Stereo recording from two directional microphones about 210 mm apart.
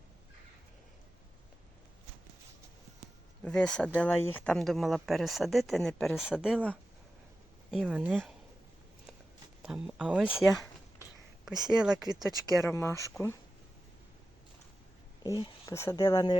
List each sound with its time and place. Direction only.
3.4 s speech: 5° left (ahead or behind)
7.7 s speech: 5° right (ahead or behind)
9.6 s speech: 5° right (ahead or behind)
11.5 s speech: 20° right (ahead or behind)
12.6 s speech: 10° left (ahead or behind)
15.4 s speech: 15° left (ahead or behind)